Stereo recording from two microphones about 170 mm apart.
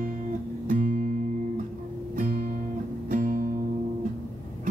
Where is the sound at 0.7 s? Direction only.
50° right (ahead or behind).